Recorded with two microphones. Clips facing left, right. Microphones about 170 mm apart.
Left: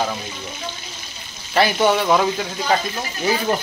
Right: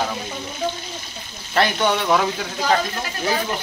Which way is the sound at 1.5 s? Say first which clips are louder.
Left 3 dB; 5° left (ahead or behind).